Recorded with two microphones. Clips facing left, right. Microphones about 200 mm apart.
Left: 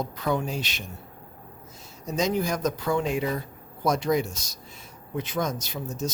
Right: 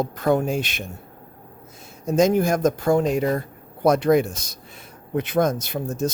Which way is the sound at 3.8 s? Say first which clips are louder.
Right 7 dB; 60° right (ahead or behind).